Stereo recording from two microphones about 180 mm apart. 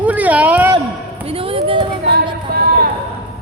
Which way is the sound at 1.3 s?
30° right (ahead or behind).